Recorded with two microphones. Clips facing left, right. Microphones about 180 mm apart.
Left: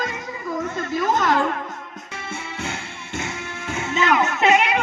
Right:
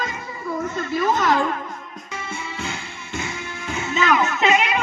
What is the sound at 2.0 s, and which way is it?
Music, 55° left (ahead or behind).